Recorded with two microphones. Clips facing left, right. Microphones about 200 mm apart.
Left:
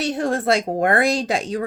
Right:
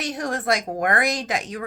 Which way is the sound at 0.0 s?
25° left (ahead or behind).